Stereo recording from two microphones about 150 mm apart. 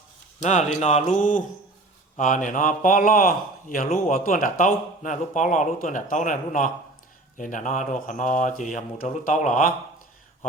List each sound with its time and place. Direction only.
0.8 s speech: 50° left (ahead or behind)